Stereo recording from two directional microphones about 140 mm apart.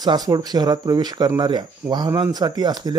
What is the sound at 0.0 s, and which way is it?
Speech, 30° right (ahead or behind).